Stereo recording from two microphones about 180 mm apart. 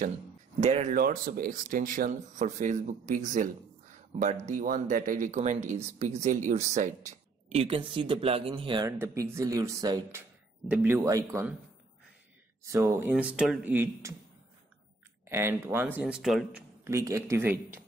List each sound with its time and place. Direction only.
0.6 s speech: 40° right (ahead or behind)
0.9 s speech: 50° right (ahead or behind); by 8.8 s 30° right (ahead or behind)
8.8 s speech: 15° right (ahead or behind)
12.6 s speech: 15° right (ahead or behind)
15.2 s speech: 15° right (ahead or behind)
16.8 s speech: 15° right (ahead or behind)